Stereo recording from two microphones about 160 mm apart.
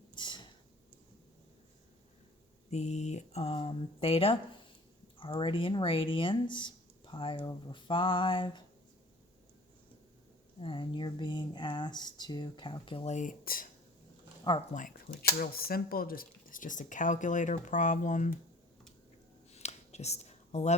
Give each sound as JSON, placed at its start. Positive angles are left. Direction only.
{"t": 0.2, "sound": "a sound", "side_deg": 30}
{"t": 2.6, "sound": "speech", "side_deg": 45}
{"t": 10.6, "sound": "speech", "side_deg": 35}
{"t": 13.1, "sound": "speech", "side_deg": 60}
{"t": 14.5, "sound": "speech", "side_deg": 30}
{"t": 15.4, "sound": "speech", "side_deg": 70}
{"t": 19.5, "sound": "a sound", "side_deg": 40}